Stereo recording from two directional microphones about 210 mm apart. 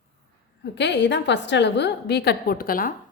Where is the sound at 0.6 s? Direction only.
55° left (ahead or behind).